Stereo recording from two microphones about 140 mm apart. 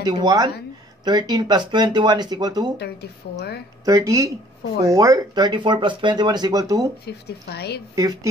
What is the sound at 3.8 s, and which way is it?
Speech, 25° right (ahead or behind).